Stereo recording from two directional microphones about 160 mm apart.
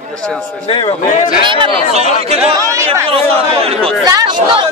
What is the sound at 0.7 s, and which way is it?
Speech, 35° left (ahead or behind).